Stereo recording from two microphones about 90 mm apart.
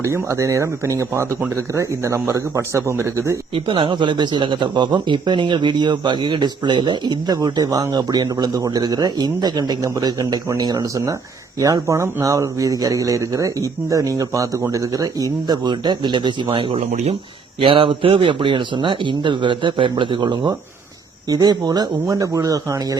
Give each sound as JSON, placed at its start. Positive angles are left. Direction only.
{"t": 0.0, "sound": "speech", "side_deg": -35}
{"t": 3.5, "sound": "speech", "side_deg": -65}